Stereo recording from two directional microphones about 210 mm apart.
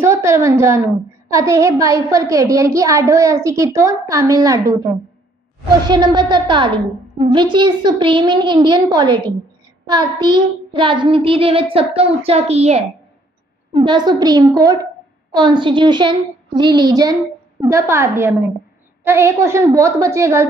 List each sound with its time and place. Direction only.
0.0 s a sound: 15° right (ahead or behind)
1.3 s a woman's voice: 15° right (ahead or behind)
5.9 s a child's voice: 20° right (ahead or behind)